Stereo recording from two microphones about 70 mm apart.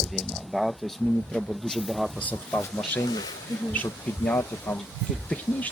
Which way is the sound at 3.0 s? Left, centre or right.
Left.